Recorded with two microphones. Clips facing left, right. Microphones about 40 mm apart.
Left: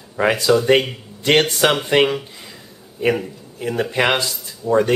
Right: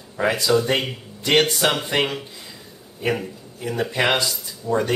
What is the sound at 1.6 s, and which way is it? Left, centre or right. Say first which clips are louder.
Speech: left 4 dB; left.